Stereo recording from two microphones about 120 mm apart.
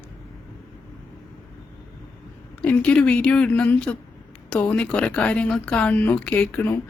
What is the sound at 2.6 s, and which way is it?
Speech, 10° left (ahead or behind).